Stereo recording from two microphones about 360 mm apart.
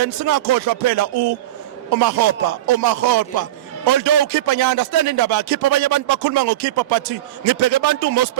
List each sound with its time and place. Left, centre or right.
0.0 s speech: right